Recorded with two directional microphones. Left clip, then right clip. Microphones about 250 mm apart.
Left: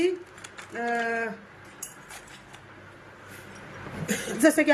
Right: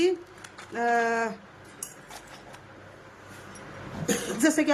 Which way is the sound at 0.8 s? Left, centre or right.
Right.